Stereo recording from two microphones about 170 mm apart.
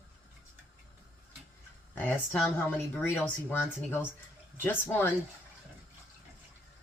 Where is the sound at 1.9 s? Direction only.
10° left (ahead or behind).